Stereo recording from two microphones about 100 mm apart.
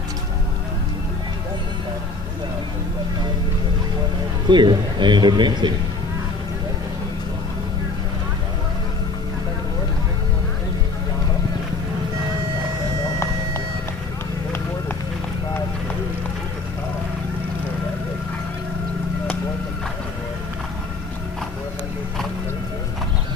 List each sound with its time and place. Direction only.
4.5 s speech: 50° right (ahead or behind)